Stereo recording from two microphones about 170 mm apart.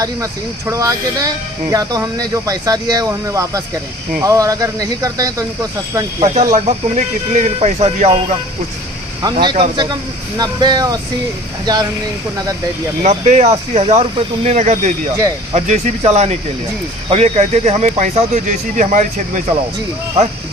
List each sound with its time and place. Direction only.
0.0 s speech: 20° right (ahead or behind)
6.1 s speech: 35° right (ahead or behind)
9.2 s speech: 25° right (ahead or behind)
13.0 s speech: 45° right (ahead or behind)